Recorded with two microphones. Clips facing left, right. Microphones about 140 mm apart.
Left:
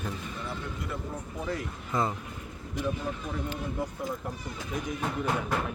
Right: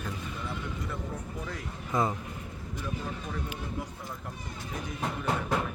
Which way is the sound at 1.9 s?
15° right (ahead or behind).